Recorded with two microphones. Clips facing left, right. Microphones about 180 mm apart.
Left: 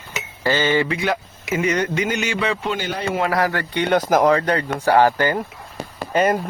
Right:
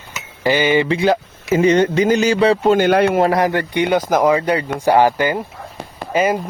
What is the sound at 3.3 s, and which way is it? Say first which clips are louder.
Speech: right 4 dB; 20° right (ahead or behind).